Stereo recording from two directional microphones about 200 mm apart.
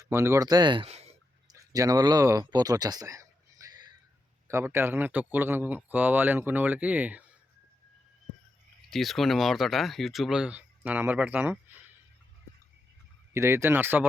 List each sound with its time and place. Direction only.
0.0 s speech: 15° right (ahead or behind); by 1.1 s 30° right (ahead or behind)
1.5 s a sound: 15° right (ahead or behind)
4.4 s speech: 15° right (ahead or behind)
8.9 s speech: centre (ahead or behind)
13.3 s speech: 15° right (ahead or behind)